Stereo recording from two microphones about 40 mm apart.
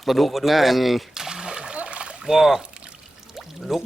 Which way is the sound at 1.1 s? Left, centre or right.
Centre.